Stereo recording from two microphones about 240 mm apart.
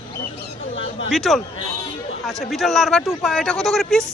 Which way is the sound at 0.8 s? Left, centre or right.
Left.